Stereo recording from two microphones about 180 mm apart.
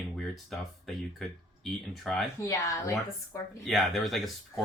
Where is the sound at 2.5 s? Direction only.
20° left (ahead or behind).